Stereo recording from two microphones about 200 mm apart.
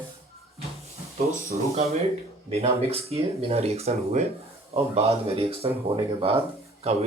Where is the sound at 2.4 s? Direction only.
30° right (ahead or behind).